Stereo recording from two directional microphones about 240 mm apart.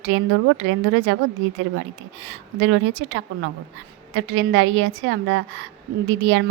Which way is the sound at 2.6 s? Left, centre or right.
Right.